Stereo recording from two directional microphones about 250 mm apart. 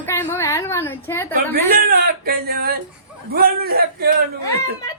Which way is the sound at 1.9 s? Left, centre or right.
Right.